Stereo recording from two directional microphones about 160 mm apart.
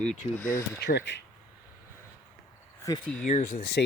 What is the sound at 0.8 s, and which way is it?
Speech, 90° left.